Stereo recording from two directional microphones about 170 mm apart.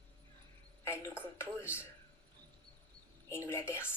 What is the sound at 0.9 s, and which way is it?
Speech, 15° left (ahead or behind).